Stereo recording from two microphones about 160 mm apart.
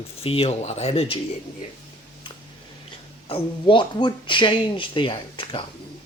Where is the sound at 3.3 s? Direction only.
35° left (ahead or behind).